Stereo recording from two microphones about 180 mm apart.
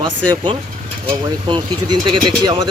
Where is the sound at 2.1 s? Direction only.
25° right (ahead or behind).